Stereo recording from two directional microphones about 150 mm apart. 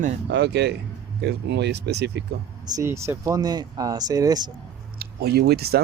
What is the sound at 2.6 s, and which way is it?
Speech, 25° right (ahead or behind).